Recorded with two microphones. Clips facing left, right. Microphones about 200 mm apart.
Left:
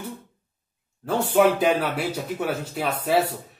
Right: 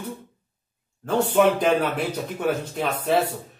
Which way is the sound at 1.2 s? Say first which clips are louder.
Even; 5° left (ahead or behind).